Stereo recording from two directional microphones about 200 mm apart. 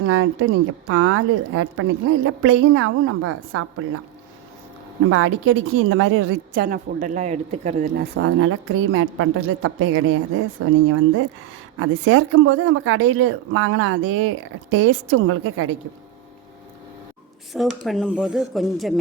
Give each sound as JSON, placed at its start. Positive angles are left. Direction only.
{"t": 0.0, "sound": "speech", "side_deg": -90}
{"t": 5.0, "sound": "speech", "side_deg": -90}
{"t": 6.6, "sound": "speech", "side_deg": -45}
{"t": 7.9, "sound": "speech", "side_deg": -75}
{"t": 11.8, "sound": "speech", "side_deg": -90}
{"t": 17.5, "sound": "speech", "side_deg": 0}